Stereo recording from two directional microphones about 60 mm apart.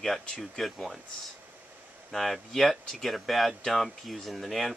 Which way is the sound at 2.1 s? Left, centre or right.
Centre.